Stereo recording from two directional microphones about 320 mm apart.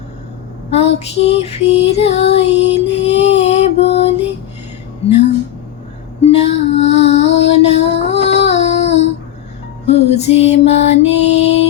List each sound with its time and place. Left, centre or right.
0.7 s music: centre
5.0 s a sound: left
6.2 s music: centre